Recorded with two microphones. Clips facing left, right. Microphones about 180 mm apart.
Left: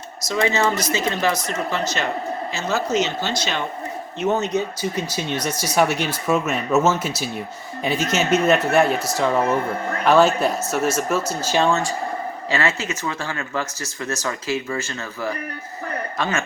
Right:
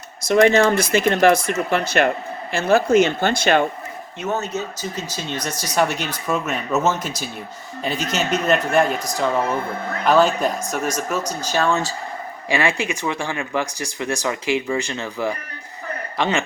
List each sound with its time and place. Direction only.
0.3 s speech: 55° right (ahead or behind)
4.3 s speech: 20° left (ahead or behind)
8.1 s speech: 10° left (ahead or behind)
9.0 s speech: 15° right (ahead or behind)
10.2 s speech: 10° left (ahead or behind)
12.5 s speech: 15° right (ahead or behind)